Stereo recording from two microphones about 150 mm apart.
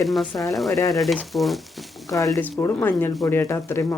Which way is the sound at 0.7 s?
25° left (ahead or behind).